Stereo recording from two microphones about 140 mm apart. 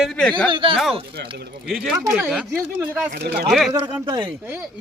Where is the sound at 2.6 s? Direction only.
15° right (ahead or behind).